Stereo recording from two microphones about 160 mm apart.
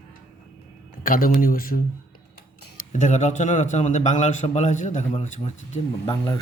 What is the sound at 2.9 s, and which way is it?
A man's voice, 50° left (ahead or behind).